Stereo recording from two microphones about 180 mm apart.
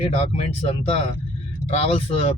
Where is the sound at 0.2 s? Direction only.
35° left (ahead or behind).